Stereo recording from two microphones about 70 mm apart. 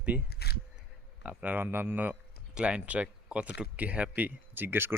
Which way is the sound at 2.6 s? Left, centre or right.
Centre.